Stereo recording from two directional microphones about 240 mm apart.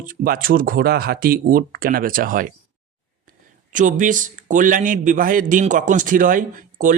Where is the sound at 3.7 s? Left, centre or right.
Right.